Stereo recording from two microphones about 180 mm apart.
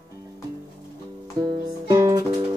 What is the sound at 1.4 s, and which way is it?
Music, 20° right (ahead or behind).